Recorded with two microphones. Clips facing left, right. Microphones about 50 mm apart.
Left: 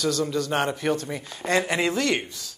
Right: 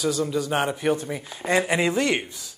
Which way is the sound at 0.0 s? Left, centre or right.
Centre.